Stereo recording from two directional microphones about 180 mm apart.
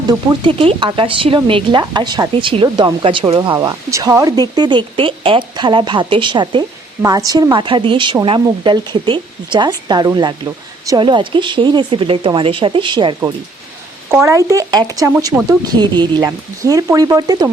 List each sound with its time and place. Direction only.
0.1 s speech: 25° right (ahead or behind)